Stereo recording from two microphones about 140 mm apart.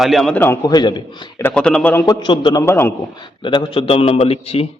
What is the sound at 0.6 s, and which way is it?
Speech, 30° left (ahead or behind).